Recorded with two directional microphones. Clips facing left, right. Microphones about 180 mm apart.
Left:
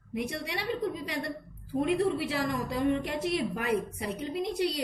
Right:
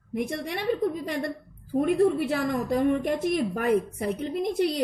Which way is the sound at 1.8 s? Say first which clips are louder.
Right 5 dB; 50° right (ahead or behind).